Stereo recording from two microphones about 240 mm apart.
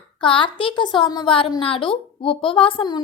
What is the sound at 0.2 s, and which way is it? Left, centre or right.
A woman's voice, centre.